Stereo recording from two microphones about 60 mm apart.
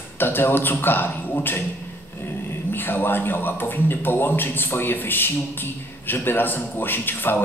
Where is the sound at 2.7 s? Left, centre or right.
Left.